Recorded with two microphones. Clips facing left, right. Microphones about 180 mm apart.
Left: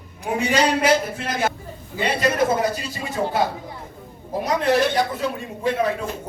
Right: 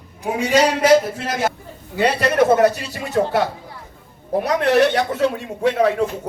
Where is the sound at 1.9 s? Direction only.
70° right (ahead or behind).